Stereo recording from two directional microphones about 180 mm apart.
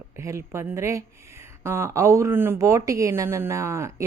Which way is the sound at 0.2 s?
15° right (ahead or behind).